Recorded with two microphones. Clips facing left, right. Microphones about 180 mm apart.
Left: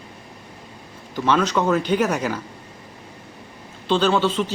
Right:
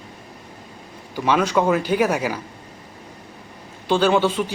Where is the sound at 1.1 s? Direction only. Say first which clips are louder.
Right 1 dB; 10° right (ahead or behind).